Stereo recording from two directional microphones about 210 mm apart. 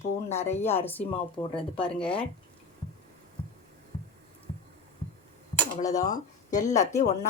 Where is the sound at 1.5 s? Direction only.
25° left (ahead or behind).